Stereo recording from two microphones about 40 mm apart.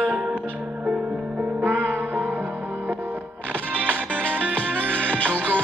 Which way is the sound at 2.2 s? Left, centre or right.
Right.